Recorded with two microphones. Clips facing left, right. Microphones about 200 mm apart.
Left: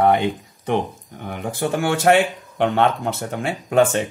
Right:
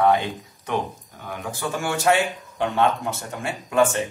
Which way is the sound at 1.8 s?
55° left (ahead or behind).